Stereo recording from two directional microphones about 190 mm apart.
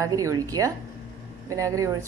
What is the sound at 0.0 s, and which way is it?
Speech, 15° right (ahead or behind).